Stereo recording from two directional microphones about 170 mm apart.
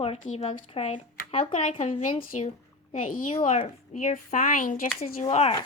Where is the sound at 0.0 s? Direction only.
35° left (ahead or behind).